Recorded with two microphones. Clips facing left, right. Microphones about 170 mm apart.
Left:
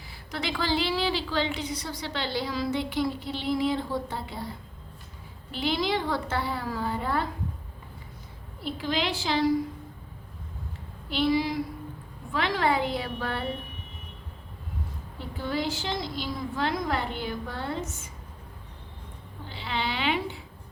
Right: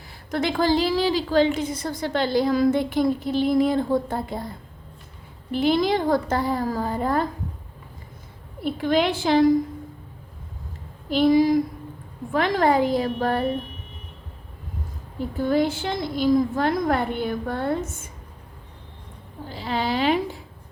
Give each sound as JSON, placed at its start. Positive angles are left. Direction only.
{"t": 0.3, "sound": "a woman's voice", "side_deg": -50}
{"t": 5.5, "sound": "a woman's voice", "side_deg": -50}
{"t": 8.6, "sound": "a woman's voice", "side_deg": -55}
{"t": 11.1, "sound": "a woman's voice", "side_deg": -45}
{"t": 15.2, "sound": "a woman's voice", "side_deg": -45}
{"t": 19.5, "sound": "a woman's voice", "side_deg": -40}